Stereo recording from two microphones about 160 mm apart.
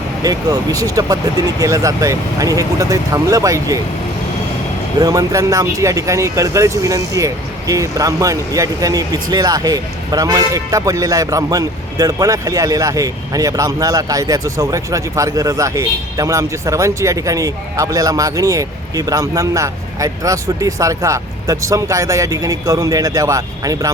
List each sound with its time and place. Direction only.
0.2 s speech: 25° right (ahead or behind)
4.9 s speech: 25° right (ahead or behind)